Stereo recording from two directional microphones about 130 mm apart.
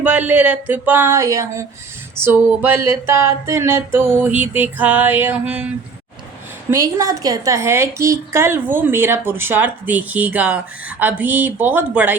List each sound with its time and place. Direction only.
0.0 s a woman's voice: 10° right (ahead or behind)
6.7 s a woman's voice: 25° right (ahead or behind)